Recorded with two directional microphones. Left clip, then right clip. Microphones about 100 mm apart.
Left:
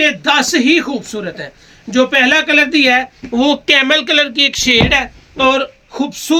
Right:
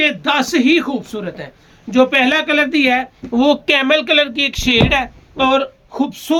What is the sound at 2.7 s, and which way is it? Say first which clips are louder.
Speech: left 3 dB; 30° right (ahead or behind).